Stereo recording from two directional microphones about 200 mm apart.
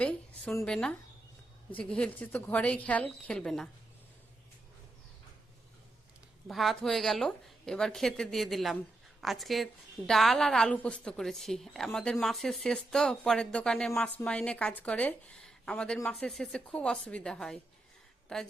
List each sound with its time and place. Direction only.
0.0 s a woman's voice: 5° left (ahead or behind)
6.5 s a woman's voice: centre (ahead or behind)